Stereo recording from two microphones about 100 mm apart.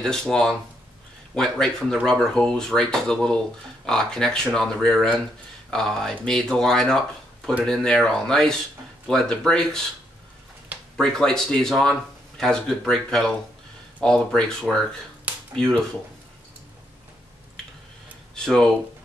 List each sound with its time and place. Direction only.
0.0 s speech: 5° left (ahead or behind)
11.0 s speech: 5° left (ahead or behind)
18.3 s speech: 5° left (ahead or behind)